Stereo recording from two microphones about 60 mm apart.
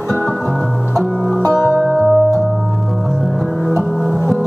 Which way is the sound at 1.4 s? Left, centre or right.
Left.